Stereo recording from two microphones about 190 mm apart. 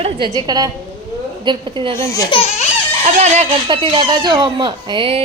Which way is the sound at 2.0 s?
15° left (ahead or behind).